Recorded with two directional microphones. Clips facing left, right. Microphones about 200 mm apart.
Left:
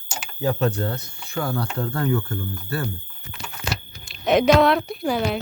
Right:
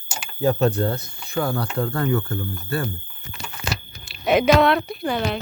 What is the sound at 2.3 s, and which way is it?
Speech, 25° right (ahead or behind).